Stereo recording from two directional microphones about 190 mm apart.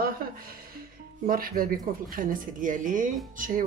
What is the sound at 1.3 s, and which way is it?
Speech, 50° right (ahead or behind).